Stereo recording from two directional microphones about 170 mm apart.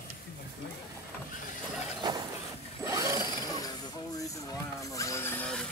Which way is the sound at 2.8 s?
20° right (ahead or behind).